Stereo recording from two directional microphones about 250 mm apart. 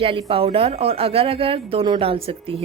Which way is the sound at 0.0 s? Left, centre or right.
Right.